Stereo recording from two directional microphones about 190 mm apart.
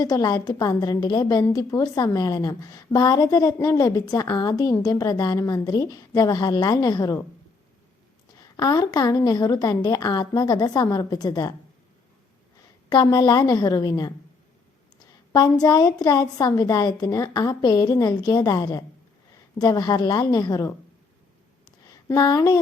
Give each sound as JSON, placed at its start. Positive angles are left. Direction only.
{"t": 0.0, "sound": "a woman's voice", "side_deg": 20}
{"t": 8.5, "sound": "a woman's voice", "side_deg": 20}
{"t": 12.9, "sound": "a woman's voice", "side_deg": 20}
{"t": 15.3, "sound": "a woman's voice", "side_deg": 20}
{"t": 22.1, "sound": "a woman's voice", "side_deg": 20}